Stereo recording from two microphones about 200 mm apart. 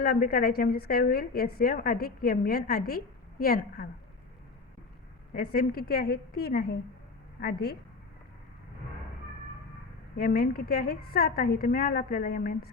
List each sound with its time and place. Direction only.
0.0 s a woman's voice: 50° left (ahead or behind)
5.3 s a woman's voice: 45° left (ahead or behind)
10.2 s a woman's voice: 45° left (ahead or behind)